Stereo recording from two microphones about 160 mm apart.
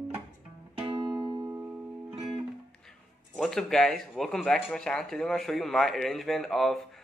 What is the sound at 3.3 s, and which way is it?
Speech, 5° left (ahead or behind).